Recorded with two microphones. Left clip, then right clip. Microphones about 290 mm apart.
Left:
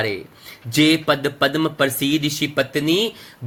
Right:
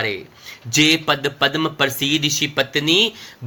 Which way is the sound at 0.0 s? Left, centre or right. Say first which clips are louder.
Even; centre.